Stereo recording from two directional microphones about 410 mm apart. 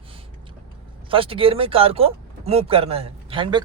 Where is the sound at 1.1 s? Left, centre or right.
Centre.